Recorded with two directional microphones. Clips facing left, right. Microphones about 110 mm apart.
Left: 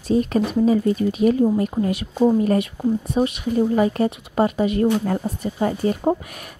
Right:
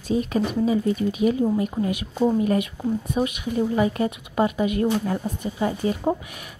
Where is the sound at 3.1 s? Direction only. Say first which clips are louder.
Left 4 dB; 35° left (ahead or behind).